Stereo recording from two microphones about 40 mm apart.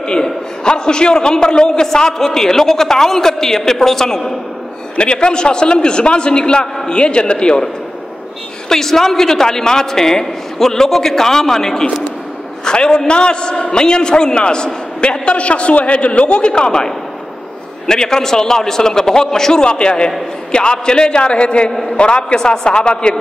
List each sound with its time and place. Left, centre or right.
0.1 s a man's voice: centre
4.9 s a man's voice: left